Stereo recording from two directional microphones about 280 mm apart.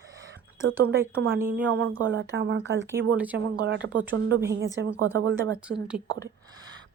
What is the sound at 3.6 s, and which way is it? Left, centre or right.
A woman's voice, right.